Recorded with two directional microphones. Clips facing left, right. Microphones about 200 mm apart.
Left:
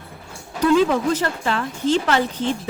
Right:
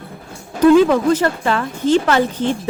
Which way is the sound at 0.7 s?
55° right (ahead or behind).